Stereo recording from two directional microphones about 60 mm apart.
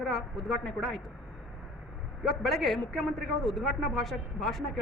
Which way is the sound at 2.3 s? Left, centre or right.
Centre.